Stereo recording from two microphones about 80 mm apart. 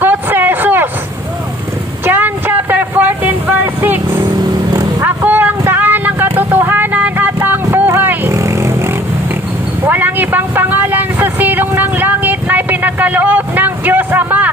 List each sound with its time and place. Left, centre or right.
0.0 s vehicle: right
2.0 s a sound: right
8.3 s vehicle: right